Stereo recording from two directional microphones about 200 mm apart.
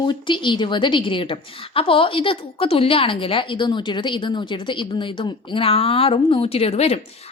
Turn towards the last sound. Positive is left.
turn(degrees=30)  # may be behind; listen again after turning